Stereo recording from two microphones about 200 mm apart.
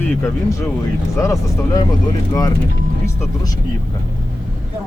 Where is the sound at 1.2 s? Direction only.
15° left (ahead or behind).